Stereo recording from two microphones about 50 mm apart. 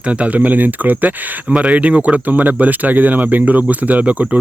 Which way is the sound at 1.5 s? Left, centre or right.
Centre.